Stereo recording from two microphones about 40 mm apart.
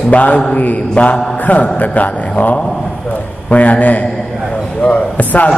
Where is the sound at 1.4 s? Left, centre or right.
Left.